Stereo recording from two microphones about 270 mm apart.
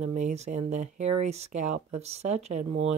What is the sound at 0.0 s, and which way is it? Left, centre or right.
Speech, right.